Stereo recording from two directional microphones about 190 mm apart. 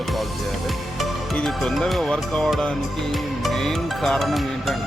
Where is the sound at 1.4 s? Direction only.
Centre (ahead or behind).